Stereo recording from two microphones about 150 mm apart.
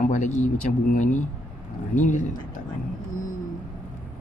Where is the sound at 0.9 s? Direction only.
55° left (ahead or behind).